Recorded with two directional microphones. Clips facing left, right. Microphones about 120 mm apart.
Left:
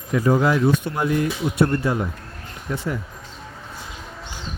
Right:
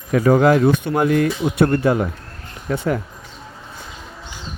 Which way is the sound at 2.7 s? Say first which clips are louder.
Right 6 dB; 60° right (ahead or behind).